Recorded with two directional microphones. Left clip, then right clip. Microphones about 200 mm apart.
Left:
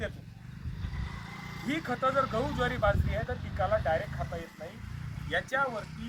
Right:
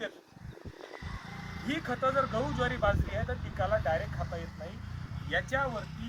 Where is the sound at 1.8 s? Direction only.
Centre (ahead or behind).